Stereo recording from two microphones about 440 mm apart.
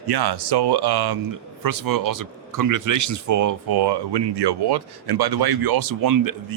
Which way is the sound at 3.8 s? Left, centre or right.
Right.